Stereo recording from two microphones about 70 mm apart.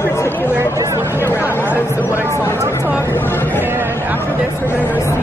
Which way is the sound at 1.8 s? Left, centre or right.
Left.